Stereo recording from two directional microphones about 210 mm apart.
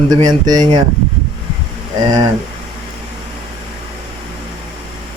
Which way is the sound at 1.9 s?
20° right (ahead or behind).